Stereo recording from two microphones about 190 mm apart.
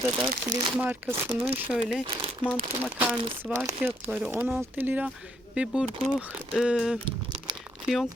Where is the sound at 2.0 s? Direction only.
25° right (ahead or behind).